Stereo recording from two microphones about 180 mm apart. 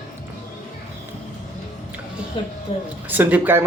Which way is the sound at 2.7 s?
30° left (ahead or behind).